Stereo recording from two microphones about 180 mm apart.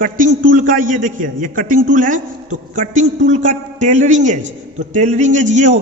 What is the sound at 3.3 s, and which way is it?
A man's voice, 40° right (ahead or behind).